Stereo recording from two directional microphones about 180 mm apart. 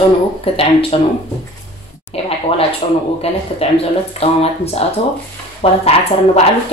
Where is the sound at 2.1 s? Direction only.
30° left (ahead or behind).